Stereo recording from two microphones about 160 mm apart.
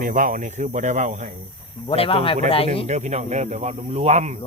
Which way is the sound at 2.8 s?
45° right (ahead or behind).